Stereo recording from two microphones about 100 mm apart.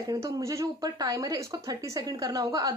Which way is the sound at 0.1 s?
30° right (ahead or behind).